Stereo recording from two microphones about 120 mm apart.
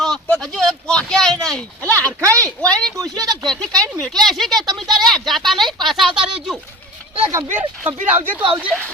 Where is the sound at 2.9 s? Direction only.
30° right (ahead or behind).